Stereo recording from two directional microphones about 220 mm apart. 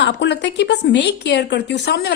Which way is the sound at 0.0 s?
55° left (ahead or behind).